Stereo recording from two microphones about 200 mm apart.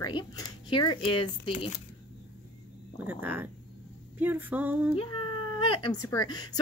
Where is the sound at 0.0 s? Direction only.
20° left (ahead or behind).